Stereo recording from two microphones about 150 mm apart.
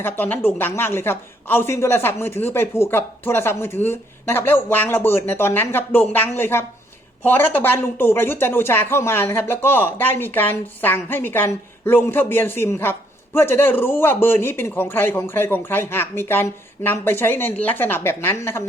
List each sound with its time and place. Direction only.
0.0 s speech: 10° left (ahead or behind)